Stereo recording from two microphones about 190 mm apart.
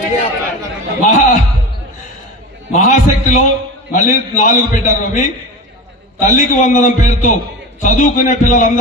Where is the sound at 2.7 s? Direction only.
40° left (ahead or behind).